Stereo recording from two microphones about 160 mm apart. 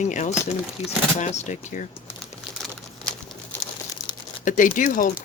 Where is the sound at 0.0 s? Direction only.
50° left (ahead or behind).